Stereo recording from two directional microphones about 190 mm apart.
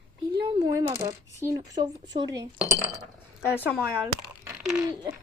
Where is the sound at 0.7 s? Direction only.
15° right (ahead or behind).